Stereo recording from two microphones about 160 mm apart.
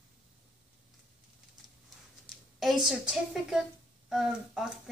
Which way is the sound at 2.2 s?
Centre (ahead or behind).